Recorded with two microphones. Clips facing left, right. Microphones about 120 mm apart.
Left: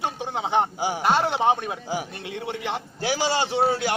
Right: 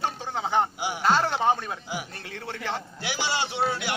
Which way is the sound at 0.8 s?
40° left (ahead or behind).